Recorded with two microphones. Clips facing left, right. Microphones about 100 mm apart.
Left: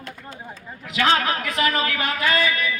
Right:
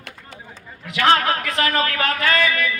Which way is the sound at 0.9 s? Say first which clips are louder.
Right 3 dB; 55° right (ahead or behind).